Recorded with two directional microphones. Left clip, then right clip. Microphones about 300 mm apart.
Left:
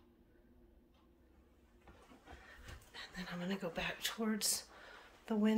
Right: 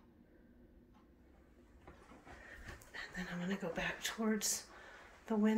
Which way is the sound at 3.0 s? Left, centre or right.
Centre.